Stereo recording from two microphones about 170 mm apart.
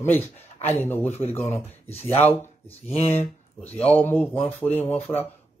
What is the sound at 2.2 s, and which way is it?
Speech, 10° left (ahead or behind).